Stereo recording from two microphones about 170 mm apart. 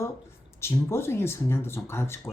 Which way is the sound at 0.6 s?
15° left (ahead or behind).